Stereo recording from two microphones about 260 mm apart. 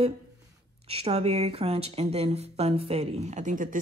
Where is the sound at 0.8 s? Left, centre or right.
Right.